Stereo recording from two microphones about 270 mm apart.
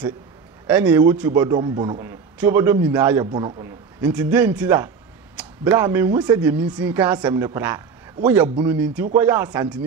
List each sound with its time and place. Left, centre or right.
0.7 s speech: centre
4.0 s speech: centre